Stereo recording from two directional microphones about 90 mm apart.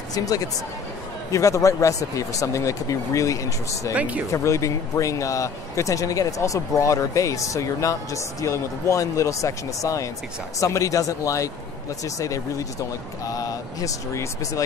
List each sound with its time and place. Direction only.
0.1 s speech: 40° left (ahead or behind)
3.9 s speech: 15° right (ahead or behind)
4.3 s speech: 35° left (ahead or behind)